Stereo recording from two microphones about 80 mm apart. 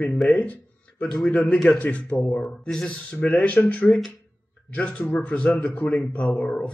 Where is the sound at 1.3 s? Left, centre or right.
Centre.